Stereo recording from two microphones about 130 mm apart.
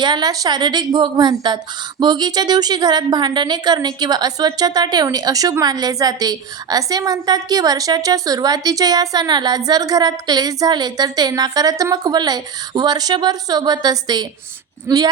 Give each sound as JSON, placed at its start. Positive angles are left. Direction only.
{"t": 0.0, "sound": "a woman's voice", "side_deg": -35}